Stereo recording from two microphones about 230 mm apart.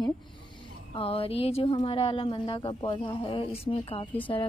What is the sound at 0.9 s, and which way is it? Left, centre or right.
Speech, left.